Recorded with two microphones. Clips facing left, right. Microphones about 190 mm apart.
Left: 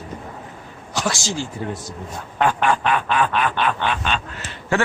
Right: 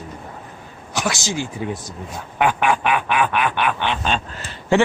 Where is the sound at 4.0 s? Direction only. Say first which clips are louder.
Right 2 dB; 35° right (ahead or behind).